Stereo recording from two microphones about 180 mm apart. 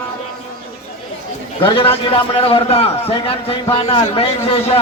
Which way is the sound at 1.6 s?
30° left (ahead or behind).